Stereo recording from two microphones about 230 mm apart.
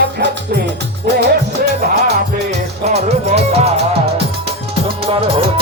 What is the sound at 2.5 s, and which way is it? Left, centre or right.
Music, right.